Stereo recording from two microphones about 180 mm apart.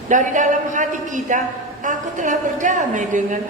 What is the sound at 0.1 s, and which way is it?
A woman's voice, 45° right (ahead or behind).